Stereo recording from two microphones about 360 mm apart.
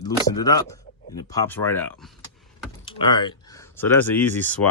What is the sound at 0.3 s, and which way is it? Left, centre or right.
Speech, centre.